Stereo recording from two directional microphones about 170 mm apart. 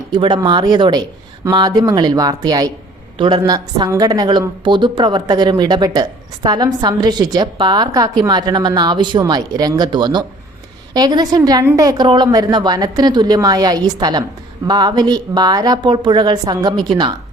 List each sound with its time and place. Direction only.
0.1 s a woman's voice: 25° right (ahead or behind)